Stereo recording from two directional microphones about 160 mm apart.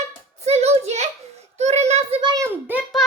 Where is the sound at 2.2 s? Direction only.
30° right (ahead or behind).